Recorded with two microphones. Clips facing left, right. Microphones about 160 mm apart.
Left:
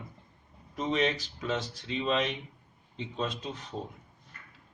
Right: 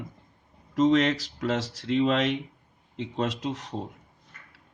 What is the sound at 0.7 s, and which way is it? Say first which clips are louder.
Speech: right 8 dB; 90° right.